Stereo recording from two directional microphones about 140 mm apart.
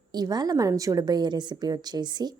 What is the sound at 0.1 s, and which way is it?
A woman's voice, 30° right (ahead or behind).